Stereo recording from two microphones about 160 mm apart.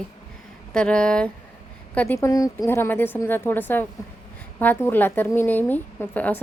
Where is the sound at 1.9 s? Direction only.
15° left (ahead or behind).